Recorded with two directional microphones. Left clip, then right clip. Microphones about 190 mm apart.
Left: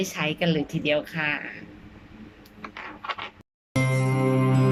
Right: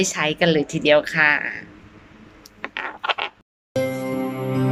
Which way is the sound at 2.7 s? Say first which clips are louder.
Right 9 dB; 40° right (ahead or behind).